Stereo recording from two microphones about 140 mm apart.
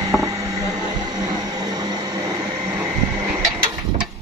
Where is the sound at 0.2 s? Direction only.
25° right (ahead or behind).